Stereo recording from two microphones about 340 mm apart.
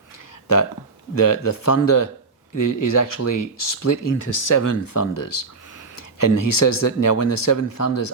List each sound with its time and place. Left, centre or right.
1.5 s speech: left